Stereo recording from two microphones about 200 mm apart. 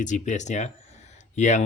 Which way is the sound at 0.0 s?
35° left (ahead or behind).